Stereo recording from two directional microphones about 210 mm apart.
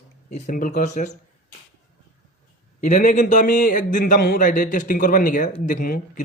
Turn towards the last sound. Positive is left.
turn(degrees=40)  # may be behind; listen again after turning